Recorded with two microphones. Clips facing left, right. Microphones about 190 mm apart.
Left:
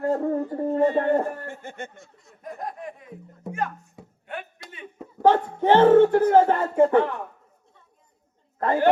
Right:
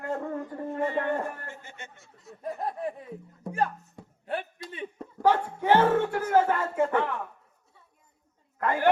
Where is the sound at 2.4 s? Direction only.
30° right (ahead or behind).